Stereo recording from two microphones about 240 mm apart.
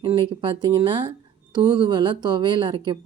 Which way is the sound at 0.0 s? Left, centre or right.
Centre.